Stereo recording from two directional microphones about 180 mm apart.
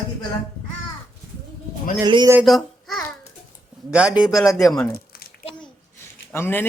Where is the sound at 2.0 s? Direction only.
20° right (ahead or behind).